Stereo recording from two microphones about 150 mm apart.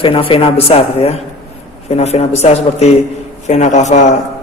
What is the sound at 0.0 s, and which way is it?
A man's voice, 35° left (ahead or behind).